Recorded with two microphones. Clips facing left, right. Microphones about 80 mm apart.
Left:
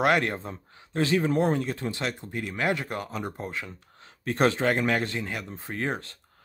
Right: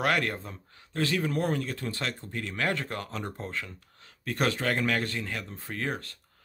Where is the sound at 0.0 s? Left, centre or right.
Left.